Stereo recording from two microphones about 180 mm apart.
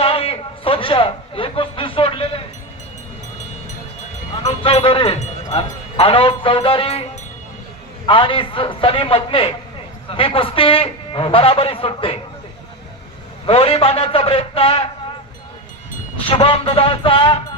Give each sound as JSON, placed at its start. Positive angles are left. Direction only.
{"t": 0.0, "sound": "a sound", "side_deg": 30}
{"t": 4.4, "sound": "a man's voice", "side_deg": 35}
{"t": 13.4, "sound": "a man's voice", "side_deg": 30}
{"t": 16.2, "sound": "a man's voice", "side_deg": 30}